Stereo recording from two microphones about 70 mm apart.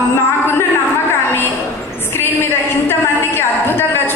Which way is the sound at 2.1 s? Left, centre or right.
Left.